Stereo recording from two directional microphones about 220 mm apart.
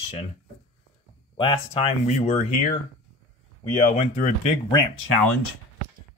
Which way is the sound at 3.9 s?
30° left (ahead or behind).